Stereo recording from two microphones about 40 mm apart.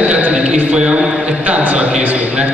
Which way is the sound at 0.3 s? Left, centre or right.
Right.